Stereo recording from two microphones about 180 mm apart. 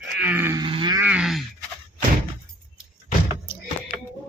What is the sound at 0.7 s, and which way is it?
Wild animals, 25° right (ahead or behind).